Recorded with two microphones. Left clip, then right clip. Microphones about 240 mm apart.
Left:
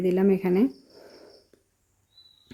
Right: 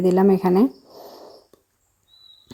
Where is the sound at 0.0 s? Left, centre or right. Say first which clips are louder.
Right 6 dB; centre.